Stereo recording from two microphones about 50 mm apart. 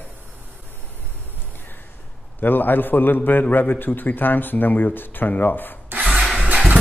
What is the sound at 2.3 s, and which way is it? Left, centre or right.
A man's voice, left.